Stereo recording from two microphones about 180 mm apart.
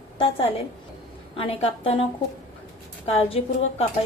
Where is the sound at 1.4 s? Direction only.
30° left (ahead or behind).